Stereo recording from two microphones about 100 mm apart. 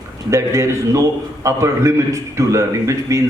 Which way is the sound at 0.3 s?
30° right (ahead or behind).